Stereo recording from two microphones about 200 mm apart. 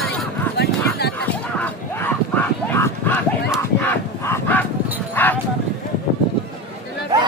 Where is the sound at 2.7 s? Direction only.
10° left (ahead or behind).